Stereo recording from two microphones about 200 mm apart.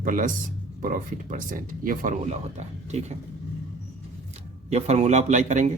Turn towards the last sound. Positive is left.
turn(degrees=-35)  # may be behind; listen again after turning